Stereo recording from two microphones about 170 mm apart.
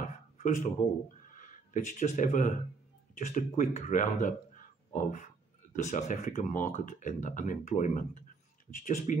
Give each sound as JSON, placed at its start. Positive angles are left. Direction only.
{"t": 0.4, "sound": "speech", "side_deg": 45}